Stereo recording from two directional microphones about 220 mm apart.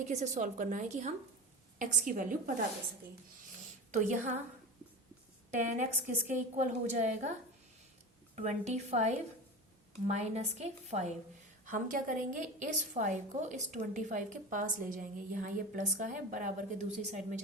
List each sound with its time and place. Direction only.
0.1 s a woman's voice: 30° right (ahead or behind)
3.9 s a woman's voice: 35° right (ahead or behind)
5.5 s a woman's voice: 35° right (ahead or behind)
8.4 s a woman's voice: 30° right (ahead or behind)